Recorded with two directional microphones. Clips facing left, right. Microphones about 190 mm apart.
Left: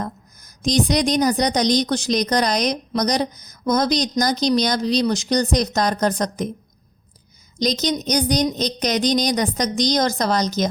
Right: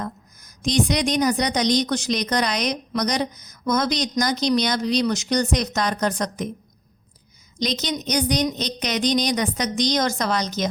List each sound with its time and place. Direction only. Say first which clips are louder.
0.0 s a woman's voice: left 2 dB; 40° left (ahead or behind)
7.6 s a woman's voice: left 4 dB; 40° left (ahead or behind)